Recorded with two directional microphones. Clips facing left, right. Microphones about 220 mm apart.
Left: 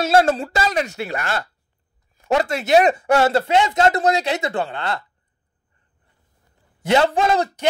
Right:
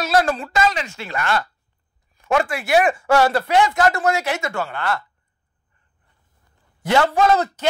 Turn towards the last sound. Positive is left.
turn(degrees=25)  # may be behind; listen again after turning